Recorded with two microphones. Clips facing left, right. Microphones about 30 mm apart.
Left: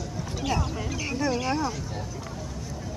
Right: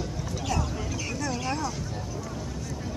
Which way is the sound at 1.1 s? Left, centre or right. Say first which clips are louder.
Left 5 dB; left.